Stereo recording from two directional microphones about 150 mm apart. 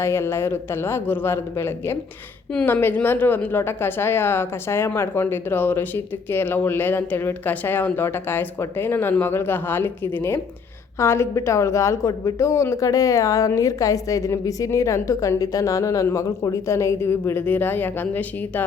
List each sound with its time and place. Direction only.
0.0 s a woman's voice: 15° left (ahead or behind)
2.5 s a woman's voice: 5° left (ahead or behind)